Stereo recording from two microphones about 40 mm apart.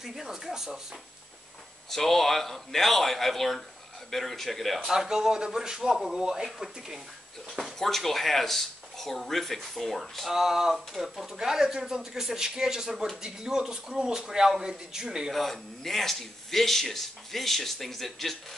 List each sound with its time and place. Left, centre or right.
0.0 s a man's voice: centre
1.9 s speech: centre
4.8 s a man's voice: centre
7.5 s speech: centre
10.3 s a man's voice: centre
11.3 s a man's voice: centre
15.3 s speech: centre